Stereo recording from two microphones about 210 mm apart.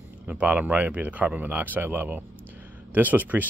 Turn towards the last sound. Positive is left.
turn(degrees=-10)  # may be behind; listen again after turning